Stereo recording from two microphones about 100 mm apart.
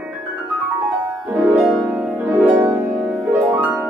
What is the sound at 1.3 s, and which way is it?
Music, 10° right (ahead or behind).